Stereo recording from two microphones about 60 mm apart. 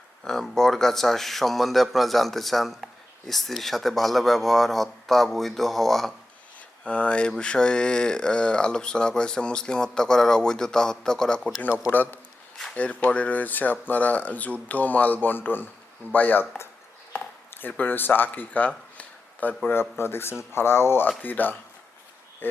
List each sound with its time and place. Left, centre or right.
0.3 s speech: centre
6.8 s speech: centre
11.9 s speech: left
19.6 s speech: left
21.2 s speech: left